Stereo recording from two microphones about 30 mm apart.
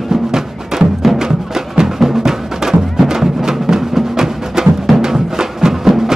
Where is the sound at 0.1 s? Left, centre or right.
Centre.